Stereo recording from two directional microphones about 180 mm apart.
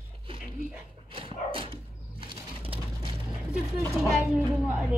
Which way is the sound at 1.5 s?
30° right (ahead or behind).